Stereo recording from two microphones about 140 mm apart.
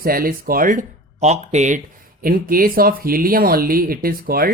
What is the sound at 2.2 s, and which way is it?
Speech, 90° right.